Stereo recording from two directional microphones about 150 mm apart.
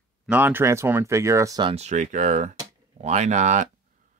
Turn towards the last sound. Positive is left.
turn(degrees=-55)  # may be behind; listen again after turning